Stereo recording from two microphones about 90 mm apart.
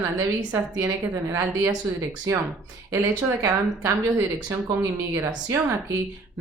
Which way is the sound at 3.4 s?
35° right (ahead or behind).